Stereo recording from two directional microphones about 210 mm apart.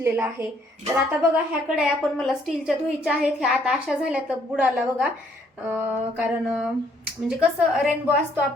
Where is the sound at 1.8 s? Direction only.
Centre (ahead or behind).